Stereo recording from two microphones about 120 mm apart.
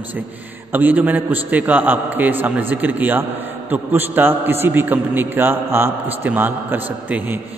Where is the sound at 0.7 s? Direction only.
15° right (ahead or behind).